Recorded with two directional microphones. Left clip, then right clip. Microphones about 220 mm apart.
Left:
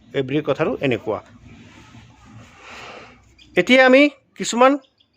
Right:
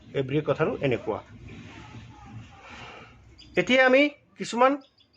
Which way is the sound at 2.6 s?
50° left (ahead or behind).